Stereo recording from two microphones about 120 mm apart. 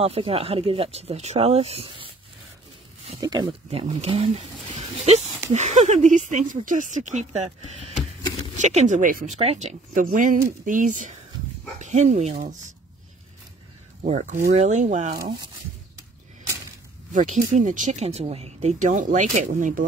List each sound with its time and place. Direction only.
0.0 s speech: 55° right (ahead or behind)
3.2 s speech: 35° right (ahead or behind)
3.7 s speech: 60° right (ahead or behind); by 7.2 s 80° right
8.5 s speech: 80° right
11.8 s speech: 80° right
14.0 s speech: 85° right
17.1 s speech: 90° right